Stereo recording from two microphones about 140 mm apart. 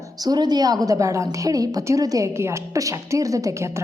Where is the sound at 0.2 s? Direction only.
30° right (ahead or behind).